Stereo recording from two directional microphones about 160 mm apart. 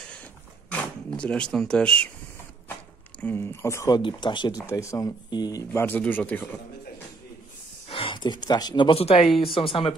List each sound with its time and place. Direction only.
0.0 s a sound: 5° left (ahead or behind)
3.2 s speech: 15° left (ahead or behind)
4.0 s speech: 30° left (ahead or behind)
5.7 s speech: 10° left (ahead or behind)
7.9 s speech: 35° left (ahead or behind)